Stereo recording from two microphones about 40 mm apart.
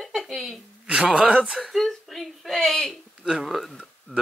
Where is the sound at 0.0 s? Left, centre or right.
Centre.